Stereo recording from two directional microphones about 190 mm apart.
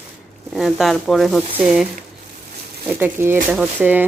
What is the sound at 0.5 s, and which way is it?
Speech, centre (ahead or behind).